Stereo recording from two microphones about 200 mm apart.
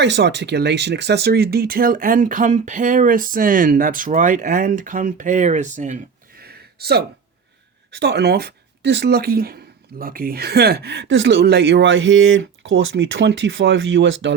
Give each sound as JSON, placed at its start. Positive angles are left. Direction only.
{"t": 0.0, "sound": "speech", "side_deg": -60}
{"t": 6.4, "sound": "a sound", "side_deg": -50}
{"t": 7.9, "sound": "speech", "side_deg": -55}